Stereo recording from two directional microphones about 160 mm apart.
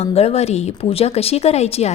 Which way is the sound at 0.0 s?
40° left (ahead or behind).